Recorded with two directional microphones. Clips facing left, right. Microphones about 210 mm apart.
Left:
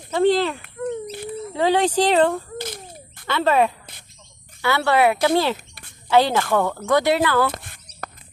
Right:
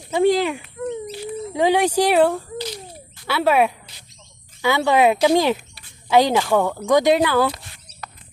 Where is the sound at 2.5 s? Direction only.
50° left (ahead or behind).